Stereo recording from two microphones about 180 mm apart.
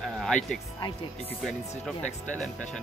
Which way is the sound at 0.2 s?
5° left (ahead or behind).